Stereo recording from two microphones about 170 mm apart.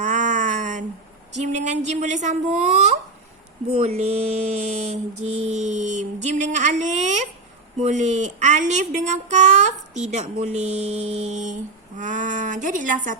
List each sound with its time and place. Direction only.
0.0 s a sound: 45° right (ahead or behind)
1.6 s speech: 45° right (ahead or behind)
3.8 s speech: 40° right (ahead or behind)